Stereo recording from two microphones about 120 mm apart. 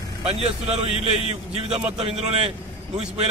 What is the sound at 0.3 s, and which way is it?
A man's voice, 60° right (ahead or behind).